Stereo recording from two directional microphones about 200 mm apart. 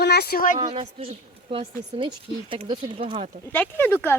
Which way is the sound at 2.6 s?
25° right (ahead or behind).